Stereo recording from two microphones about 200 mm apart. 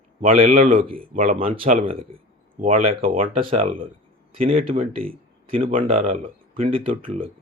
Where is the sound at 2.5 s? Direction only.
40° right (ahead or behind).